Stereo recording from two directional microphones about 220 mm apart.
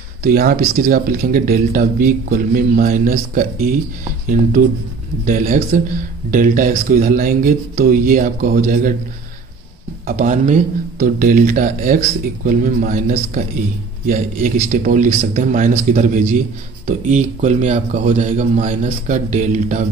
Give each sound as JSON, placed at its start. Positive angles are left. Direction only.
{"t": 0.2, "sound": "speech", "side_deg": -40}
{"t": 10.0, "sound": "speech", "side_deg": -35}